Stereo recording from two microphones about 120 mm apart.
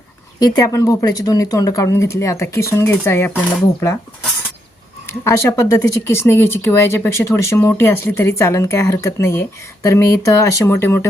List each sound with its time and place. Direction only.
0.3 s speech: 30° left (ahead or behind)
5.0 s speech: 25° left (ahead or behind)